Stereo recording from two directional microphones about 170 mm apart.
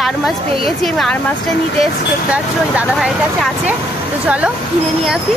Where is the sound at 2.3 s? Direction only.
5° right (ahead or behind).